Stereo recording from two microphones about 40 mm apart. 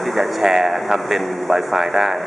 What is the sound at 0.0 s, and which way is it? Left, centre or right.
Speech, centre.